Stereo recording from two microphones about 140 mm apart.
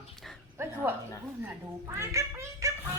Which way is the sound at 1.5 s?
20° right (ahead or behind).